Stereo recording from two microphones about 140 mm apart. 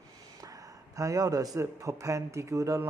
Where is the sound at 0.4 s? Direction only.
25° right (ahead or behind).